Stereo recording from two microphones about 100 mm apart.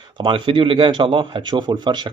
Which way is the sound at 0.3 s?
65° right (ahead or behind).